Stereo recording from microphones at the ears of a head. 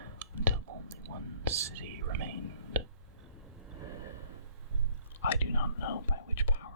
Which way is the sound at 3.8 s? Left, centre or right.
Right.